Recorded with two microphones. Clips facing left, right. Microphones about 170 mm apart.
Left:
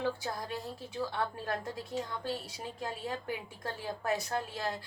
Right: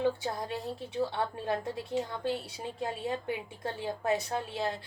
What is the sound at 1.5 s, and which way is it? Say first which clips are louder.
A woman's voice: right 4 dB; 25° right (ahead or behind).